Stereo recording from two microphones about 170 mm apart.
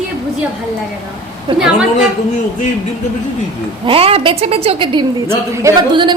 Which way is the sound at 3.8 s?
35° right (ahead or behind).